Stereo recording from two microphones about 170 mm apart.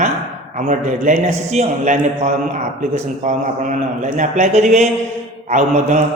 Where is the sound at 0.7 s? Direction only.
45° right (ahead or behind).